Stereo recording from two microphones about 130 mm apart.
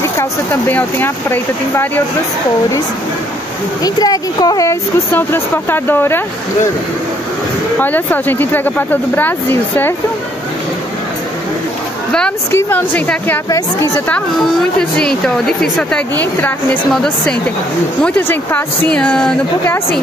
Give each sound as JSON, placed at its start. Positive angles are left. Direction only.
{"t": 0.0, "sound": "speech", "side_deg": 20}
{"t": 3.8, "sound": "speech", "side_deg": 30}
{"t": 5.1, "sound": "speech", "side_deg": 15}
{"t": 7.8, "sound": "speech", "side_deg": 15}
{"t": 12.4, "sound": "speech", "side_deg": 20}
{"t": 13.5, "sound": "speech", "side_deg": 25}
{"t": 14.8, "sound": "a woman's voice", "side_deg": 5}